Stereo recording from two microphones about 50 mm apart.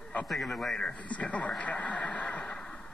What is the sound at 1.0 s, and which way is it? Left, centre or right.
A man's voice, left.